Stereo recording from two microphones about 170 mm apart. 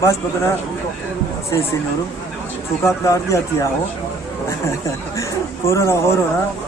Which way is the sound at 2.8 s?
15° left (ahead or behind).